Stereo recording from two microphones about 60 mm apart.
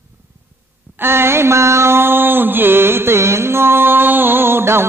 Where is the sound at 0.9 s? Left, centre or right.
Right.